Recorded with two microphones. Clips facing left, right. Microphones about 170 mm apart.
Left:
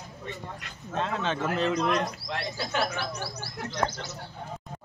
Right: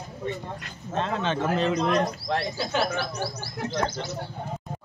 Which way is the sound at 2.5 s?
20° right (ahead or behind).